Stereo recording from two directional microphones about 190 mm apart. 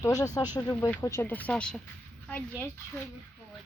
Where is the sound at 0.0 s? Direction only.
20° left (ahead or behind).